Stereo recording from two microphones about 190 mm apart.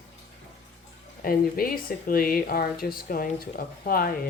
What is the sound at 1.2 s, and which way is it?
Speech, 50° left (ahead or behind).